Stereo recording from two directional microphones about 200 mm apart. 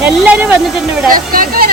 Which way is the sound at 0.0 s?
5° right (ahead or behind).